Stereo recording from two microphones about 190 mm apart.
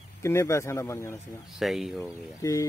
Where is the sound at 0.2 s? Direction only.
15° left (ahead or behind).